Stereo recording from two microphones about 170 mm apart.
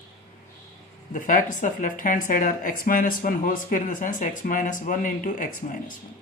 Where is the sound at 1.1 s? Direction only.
50° left (ahead or behind).